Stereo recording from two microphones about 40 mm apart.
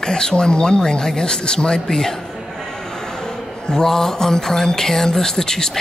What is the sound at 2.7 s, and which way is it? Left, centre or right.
Mantra, centre.